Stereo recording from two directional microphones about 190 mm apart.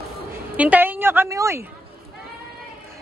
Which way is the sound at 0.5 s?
10° right (ahead or behind).